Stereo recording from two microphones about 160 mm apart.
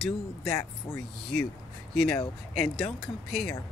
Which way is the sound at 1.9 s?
5° left (ahead or behind).